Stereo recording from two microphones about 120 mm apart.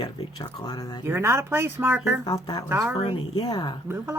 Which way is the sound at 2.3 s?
35° left (ahead or behind).